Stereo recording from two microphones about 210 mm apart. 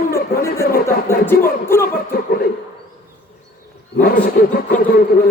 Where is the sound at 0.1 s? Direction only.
45° left (ahead or behind).